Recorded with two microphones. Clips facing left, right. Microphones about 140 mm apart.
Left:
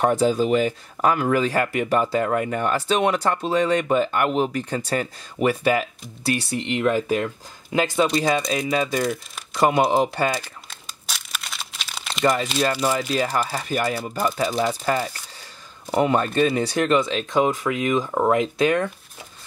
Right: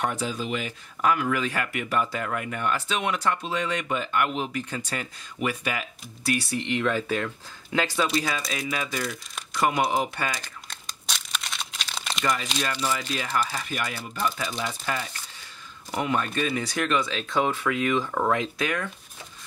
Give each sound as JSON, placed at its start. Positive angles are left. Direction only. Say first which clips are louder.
{"t": 0.0, "sound": "speech", "louder": "left 10 dB", "side_deg": 40}
{"t": 10.7, "sound": "crumpling", "louder": "right 2 dB", "side_deg": 5}
{"t": 13.1, "sound": "speech", "louder": "left 5 dB", "side_deg": 35}
{"t": 17.0, "sound": "speech", "louder": "left 5 dB", "side_deg": 20}